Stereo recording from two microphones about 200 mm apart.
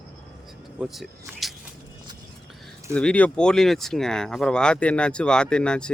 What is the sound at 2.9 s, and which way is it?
Speech, 5° left (ahead or behind).